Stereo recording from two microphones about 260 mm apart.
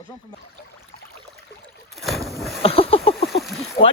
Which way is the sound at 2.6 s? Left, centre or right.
Left.